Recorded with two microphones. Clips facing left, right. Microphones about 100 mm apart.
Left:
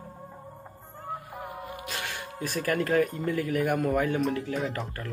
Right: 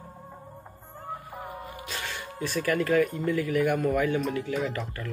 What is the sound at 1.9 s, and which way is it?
Music, 55° left (ahead or behind).